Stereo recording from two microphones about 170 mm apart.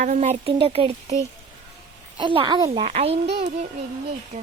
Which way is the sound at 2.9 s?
40° right (ahead or behind).